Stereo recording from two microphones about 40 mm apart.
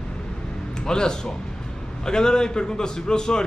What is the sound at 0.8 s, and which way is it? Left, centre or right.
A man's voice, centre.